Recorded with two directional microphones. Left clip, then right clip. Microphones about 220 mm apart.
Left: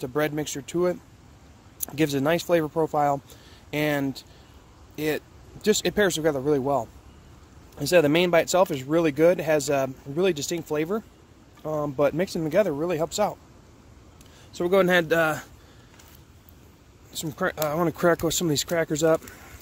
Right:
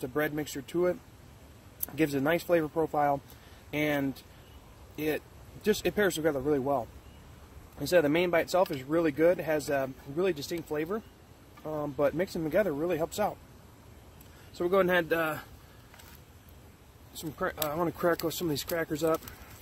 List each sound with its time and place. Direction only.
0.0 s speech: 40° left (ahead or behind)
14.5 s speech: 45° left (ahead or behind)
17.1 s speech: 55° left (ahead or behind)